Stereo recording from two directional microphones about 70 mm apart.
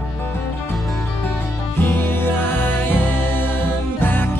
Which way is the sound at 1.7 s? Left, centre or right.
Left.